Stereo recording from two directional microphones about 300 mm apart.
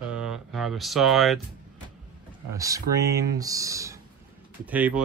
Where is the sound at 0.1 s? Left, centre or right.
Centre.